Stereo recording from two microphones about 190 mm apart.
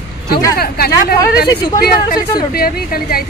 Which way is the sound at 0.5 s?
55° left (ahead or behind).